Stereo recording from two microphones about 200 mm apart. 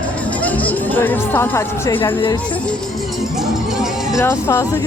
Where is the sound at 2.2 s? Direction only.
25° left (ahead or behind).